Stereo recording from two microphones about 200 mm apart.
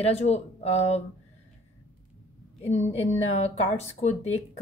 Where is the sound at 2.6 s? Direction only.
35° left (ahead or behind).